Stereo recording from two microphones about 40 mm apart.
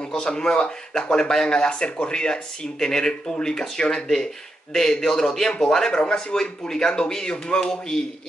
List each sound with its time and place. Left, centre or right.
0.0 s a man's voice: centre